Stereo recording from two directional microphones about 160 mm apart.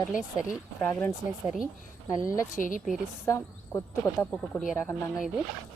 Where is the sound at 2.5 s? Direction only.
55° left (ahead or behind).